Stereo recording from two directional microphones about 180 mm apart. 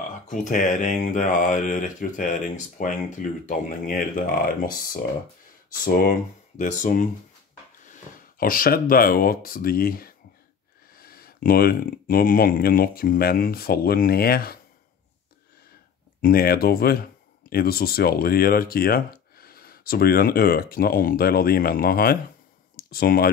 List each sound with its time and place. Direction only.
0.3 s speech: 45° left (ahead or behind)
16.2 s speech: 55° left (ahead or behind)